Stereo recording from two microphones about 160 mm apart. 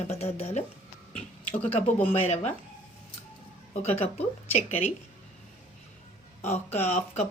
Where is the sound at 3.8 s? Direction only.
40° left (ahead or behind).